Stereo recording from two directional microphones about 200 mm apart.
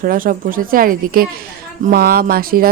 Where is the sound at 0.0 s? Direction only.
45° right (ahead or behind).